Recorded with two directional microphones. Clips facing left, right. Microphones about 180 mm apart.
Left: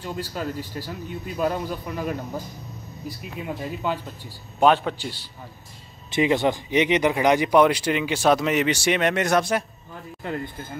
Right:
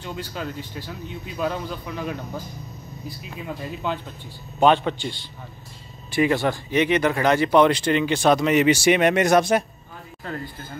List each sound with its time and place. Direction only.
0.3 s a man's voice: 5° left (ahead or behind)
3.4 s a man's voice: 10° left (ahead or behind)
6.1 s speech: 20° left (ahead or behind); by 9.7 s 20° right (ahead or behind)
10.2 s speech: 20° left (ahead or behind)